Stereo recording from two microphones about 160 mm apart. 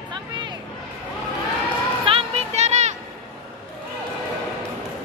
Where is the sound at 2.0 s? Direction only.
40° right (ahead or behind).